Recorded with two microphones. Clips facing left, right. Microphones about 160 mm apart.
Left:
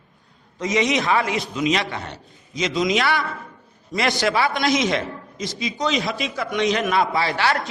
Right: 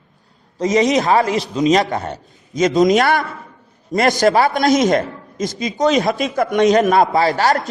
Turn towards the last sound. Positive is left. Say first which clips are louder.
# right 6 dB
turn(degrees=-40)  # may be behind; listen again after turning